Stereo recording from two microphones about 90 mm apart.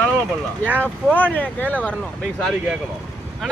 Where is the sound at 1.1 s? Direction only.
20° left (ahead or behind).